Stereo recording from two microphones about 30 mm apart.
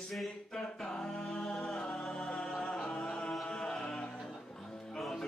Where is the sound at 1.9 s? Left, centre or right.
Centre.